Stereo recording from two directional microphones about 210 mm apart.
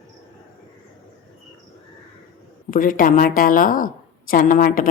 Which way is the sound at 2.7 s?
40° left (ahead or behind).